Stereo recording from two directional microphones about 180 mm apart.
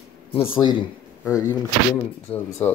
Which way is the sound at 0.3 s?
30° left (ahead or behind).